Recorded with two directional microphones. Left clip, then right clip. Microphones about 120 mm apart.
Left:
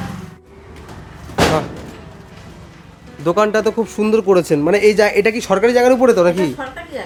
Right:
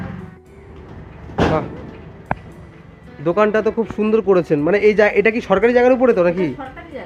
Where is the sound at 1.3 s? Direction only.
30° left (ahead or behind).